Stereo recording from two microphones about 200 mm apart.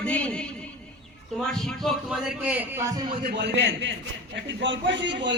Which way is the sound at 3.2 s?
55° right (ahead or behind).